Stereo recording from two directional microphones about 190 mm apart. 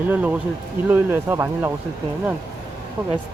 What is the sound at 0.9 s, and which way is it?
Speech, 10° right (ahead or behind).